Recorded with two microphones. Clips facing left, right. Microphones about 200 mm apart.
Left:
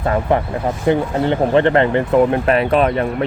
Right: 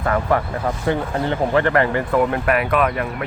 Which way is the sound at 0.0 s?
20° left (ahead or behind).